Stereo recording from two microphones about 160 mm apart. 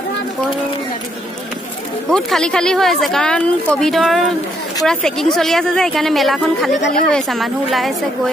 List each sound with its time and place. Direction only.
2.0 s speech: 5° left (ahead or behind)